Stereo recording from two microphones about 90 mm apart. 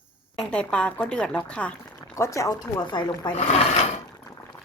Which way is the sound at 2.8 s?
55° left (ahead or behind).